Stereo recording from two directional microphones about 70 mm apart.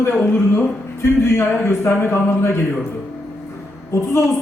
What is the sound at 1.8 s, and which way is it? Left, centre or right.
Speech, left.